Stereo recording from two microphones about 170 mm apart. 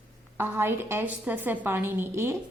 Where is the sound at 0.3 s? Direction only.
10° right (ahead or behind).